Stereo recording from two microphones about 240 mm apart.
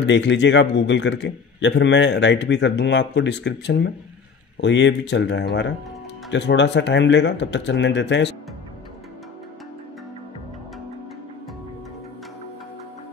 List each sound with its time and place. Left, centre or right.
0.0 s a man's voice: left